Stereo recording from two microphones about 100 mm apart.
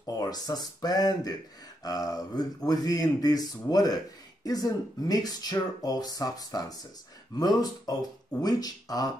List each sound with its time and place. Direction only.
0.0 s speech: 40° left (ahead or behind)